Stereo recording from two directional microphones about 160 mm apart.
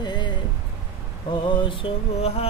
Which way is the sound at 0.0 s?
30° left (ahead or behind).